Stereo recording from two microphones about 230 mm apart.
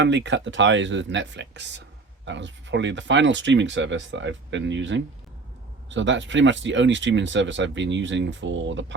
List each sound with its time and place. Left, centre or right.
0.0 s speech: right